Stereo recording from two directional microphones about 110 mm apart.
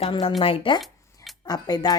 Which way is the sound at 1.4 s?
35° left (ahead or behind).